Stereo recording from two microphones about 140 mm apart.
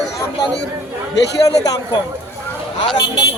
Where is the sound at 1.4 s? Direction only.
25° left (ahead or behind).